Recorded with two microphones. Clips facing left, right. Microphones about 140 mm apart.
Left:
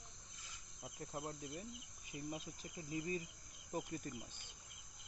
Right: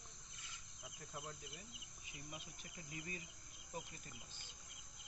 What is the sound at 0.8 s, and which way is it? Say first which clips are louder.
Speech: left 6 dB; 45° left (ahead or behind).